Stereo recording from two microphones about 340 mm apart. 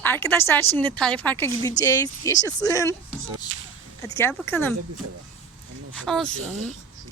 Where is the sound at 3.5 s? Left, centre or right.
Right.